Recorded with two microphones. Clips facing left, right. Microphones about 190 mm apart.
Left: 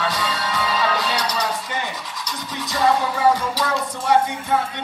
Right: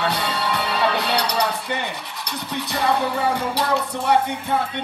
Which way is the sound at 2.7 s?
65° right (ahead or behind).